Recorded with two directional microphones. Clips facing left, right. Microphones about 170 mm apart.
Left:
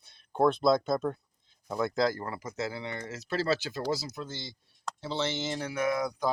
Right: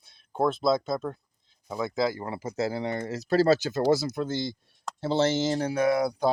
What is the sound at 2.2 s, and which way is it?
Speech, 25° right (ahead or behind).